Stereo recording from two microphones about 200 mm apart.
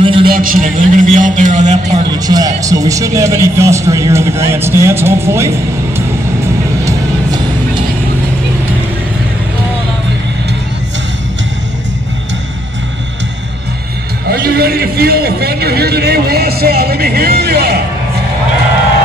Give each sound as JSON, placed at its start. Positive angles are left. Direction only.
{"t": 0.0, "sound": "a sound", "side_deg": -25}
{"t": 0.3, "sound": "a man's voice", "side_deg": -45}
{"t": 2.0, "sound": "a man's voice", "side_deg": -20}
{"t": 5.9, "sound": "music", "side_deg": -15}
{"t": 14.3, "sound": "a man's voice", "side_deg": -50}